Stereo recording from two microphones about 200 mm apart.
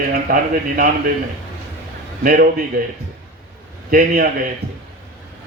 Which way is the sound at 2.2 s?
45° right (ahead or behind).